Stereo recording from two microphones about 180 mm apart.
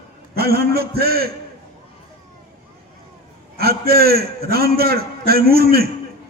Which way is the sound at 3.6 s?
60° right (ahead or behind).